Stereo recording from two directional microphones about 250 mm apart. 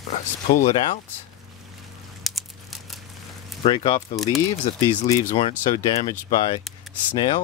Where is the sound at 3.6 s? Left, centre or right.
Left.